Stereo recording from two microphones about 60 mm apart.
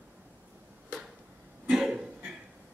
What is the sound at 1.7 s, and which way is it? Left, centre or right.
Cough, centre.